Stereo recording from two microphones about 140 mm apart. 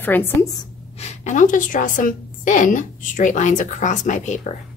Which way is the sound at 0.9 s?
55° left (ahead or behind).